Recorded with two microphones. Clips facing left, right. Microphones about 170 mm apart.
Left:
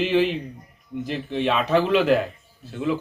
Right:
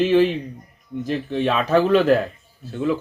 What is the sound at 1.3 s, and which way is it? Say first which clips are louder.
Speech: right 2 dB; 45° right (ahead or behind).